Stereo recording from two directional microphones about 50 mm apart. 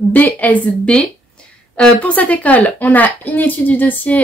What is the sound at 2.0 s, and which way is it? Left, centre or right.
A woman's voice, left.